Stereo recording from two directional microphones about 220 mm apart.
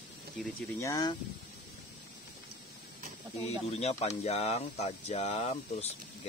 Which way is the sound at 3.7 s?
30° left (ahead or behind).